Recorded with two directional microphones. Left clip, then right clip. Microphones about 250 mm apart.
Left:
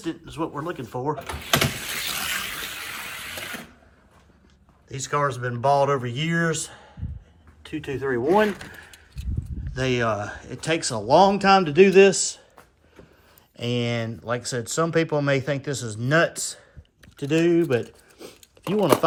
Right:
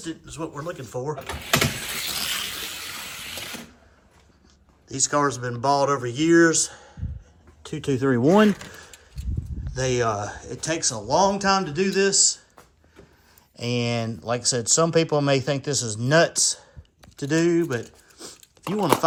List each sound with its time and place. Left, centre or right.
0.0 s speech: centre
2.4 s water: centre
4.9 s speech: centre
7.6 s speech: right
8.0 s speech: left
9.6 s speech: centre
13.6 s speech: centre
18.2 s biting: centre